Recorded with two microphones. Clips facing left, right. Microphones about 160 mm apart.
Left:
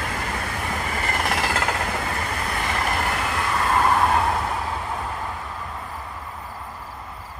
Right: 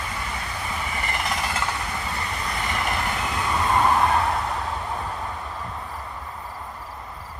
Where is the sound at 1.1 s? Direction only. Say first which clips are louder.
Left 4 dB; 50° left (ahead or behind).